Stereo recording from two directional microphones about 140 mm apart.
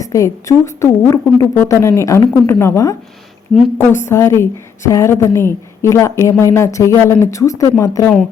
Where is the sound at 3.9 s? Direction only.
15° left (ahead or behind).